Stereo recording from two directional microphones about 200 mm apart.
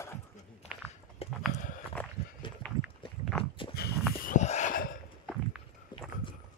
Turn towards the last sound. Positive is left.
turn(degrees=0)  # may be behind; listen again after turning